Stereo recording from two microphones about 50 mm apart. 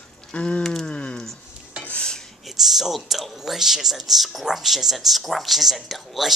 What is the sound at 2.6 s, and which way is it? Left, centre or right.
Speech, centre.